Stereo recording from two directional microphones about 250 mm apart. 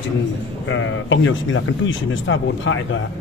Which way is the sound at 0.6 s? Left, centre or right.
Left.